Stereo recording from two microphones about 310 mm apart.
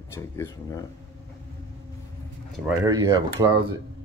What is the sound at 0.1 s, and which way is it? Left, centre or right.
Speech, centre.